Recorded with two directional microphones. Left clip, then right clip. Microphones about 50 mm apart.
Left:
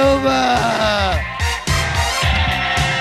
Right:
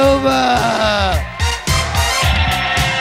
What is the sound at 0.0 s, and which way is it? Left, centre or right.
Music, left.